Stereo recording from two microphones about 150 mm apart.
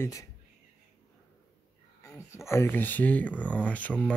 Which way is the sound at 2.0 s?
20° left (ahead or behind).